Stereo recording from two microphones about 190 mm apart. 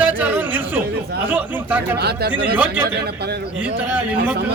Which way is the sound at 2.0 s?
60° right (ahead or behind).